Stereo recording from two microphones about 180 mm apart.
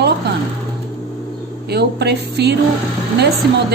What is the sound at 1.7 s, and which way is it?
Speech, 65° right (ahead or behind).